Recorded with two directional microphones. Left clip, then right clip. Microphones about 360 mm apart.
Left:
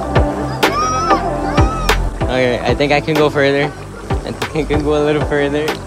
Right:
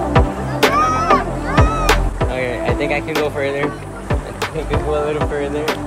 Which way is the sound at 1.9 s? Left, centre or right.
Centre.